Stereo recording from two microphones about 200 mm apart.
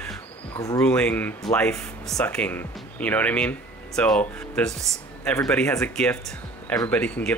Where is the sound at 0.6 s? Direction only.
15° left (ahead or behind).